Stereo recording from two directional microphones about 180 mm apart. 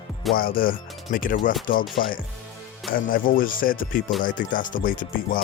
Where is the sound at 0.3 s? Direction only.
55° left (ahead or behind).